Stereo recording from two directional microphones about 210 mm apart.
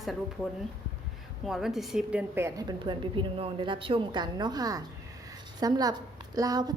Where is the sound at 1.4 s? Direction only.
Centre (ahead or behind).